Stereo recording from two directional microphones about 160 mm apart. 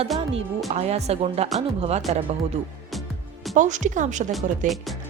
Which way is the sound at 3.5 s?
50° right (ahead or behind).